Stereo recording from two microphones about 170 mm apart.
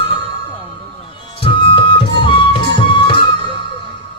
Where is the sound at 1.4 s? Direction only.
30° left (ahead or behind).